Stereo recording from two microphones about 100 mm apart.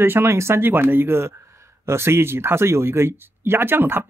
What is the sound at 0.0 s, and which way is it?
Speech, 20° right (ahead or behind).